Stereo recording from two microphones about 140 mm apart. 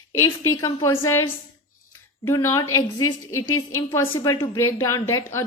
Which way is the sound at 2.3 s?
20° left (ahead or behind).